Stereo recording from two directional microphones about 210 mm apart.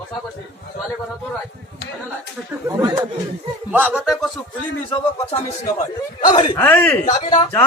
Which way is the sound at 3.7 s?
5° right (ahead or behind).